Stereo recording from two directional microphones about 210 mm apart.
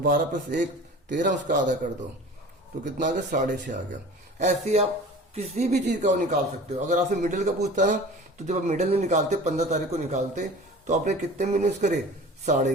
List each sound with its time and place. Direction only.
0.0 s speech: 40° right (ahead or behind)